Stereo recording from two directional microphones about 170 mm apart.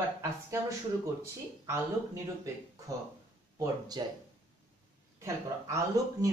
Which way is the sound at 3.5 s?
25° right (ahead or behind).